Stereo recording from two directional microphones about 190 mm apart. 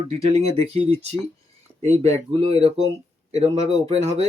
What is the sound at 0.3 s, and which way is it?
Speech, 30° right (ahead or behind).